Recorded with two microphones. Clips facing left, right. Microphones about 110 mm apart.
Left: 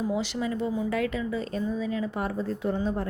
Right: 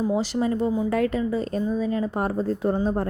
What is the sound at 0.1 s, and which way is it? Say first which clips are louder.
A woman's voice: right 5 dB; 40° right (ahead or behind).